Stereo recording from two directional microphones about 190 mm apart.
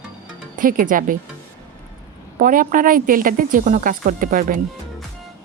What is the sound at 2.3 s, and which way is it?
A woman's voice, 45° right (ahead or behind).